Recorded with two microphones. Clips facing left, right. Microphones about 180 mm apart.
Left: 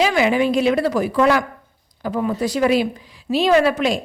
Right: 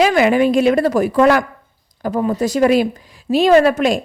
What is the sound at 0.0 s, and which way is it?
A woman's voice, 50° right (ahead or behind).